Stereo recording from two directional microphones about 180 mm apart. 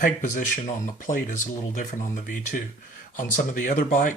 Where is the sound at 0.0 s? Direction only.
45° left (ahead or behind).